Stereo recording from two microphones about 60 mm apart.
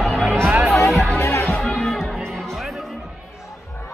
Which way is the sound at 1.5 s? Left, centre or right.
Centre.